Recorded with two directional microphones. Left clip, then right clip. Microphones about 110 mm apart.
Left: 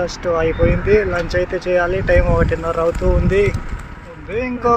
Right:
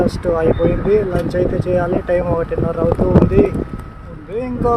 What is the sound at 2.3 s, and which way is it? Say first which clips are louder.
Speech: left 1 dB; 15° right (ahead or behind).